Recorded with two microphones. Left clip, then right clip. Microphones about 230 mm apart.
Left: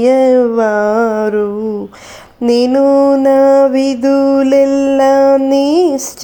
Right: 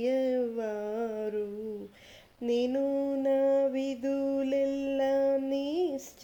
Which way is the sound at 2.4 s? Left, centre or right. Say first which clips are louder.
Left 19 dB; centre.